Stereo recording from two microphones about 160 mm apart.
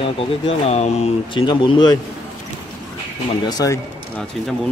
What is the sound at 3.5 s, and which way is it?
Speech, 25° left (ahead or behind).